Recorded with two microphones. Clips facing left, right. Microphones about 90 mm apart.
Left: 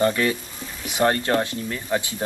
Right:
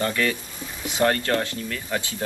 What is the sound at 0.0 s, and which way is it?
Speech, 25° left (ahead or behind).